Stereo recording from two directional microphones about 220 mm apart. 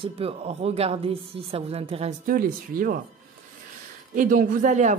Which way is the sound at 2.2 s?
40° right (ahead or behind).